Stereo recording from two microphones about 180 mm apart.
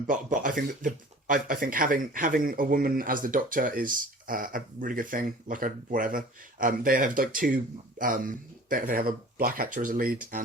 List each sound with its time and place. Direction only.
0.1 s speech: 50° right (ahead or behind)